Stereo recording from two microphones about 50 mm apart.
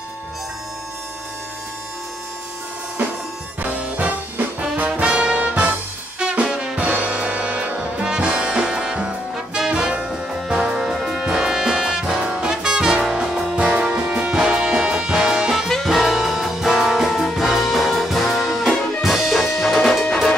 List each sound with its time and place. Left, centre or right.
3.6 s music: right
3.9 s music: right
4.8 s brass instrument: right
6.4 s music: centre
6.8 s music: right
8.0 s brass instrument: centre
13.6 s music: centre
15.7 s music: centre